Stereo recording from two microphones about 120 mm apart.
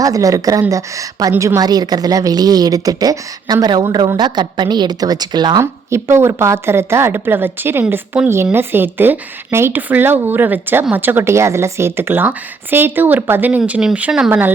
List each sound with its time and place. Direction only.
0.0 s a woman's voice: 30° right (ahead or behind)
5.9 s a woman's voice: 20° right (ahead or behind)